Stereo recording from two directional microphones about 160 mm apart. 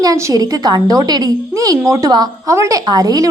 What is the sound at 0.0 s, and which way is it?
A woman's voice, 20° right (ahead or behind).